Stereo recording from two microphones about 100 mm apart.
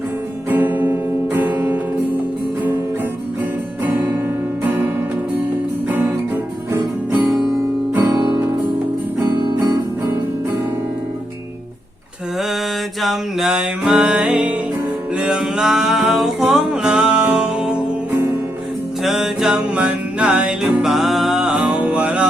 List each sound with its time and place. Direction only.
0.5 s music: 20° right (ahead or behind)
3.8 s music: 20° right (ahead or behind)
9.2 s guitar: 25° right (ahead or behind)
13.0 s music: centre (ahead or behind)
19.0 s music: 5° right (ahead or behind)